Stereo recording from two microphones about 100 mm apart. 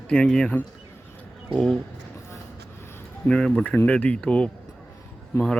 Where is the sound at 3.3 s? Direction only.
10° left (ahead or behind).